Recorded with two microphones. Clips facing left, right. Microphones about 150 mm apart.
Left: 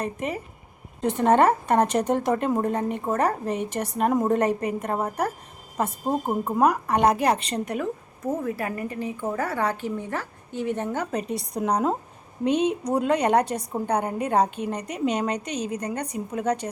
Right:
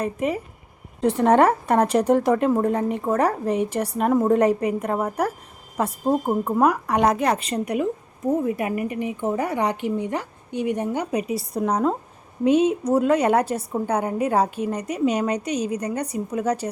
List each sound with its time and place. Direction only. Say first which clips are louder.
0.0 s a woman's voice: right 5 dB; 10° right (ahead or behind)
4.9 s speech: right 3 dB; 10° left (ahead or behind)
7.3 s a woman's voice: right 4 dB; 5° right (ahead or behind)